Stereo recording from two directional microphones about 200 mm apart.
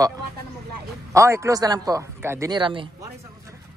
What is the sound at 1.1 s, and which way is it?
A man's voice, 15° right (ahead or behind).